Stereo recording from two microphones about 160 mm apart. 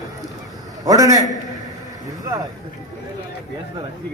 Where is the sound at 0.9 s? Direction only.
20° right (ahead or behind).